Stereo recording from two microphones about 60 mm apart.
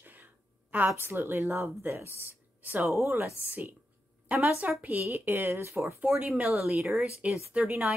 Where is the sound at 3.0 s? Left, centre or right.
Right.